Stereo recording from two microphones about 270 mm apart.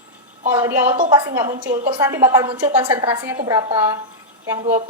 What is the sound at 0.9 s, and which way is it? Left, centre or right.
A woman's voice, right.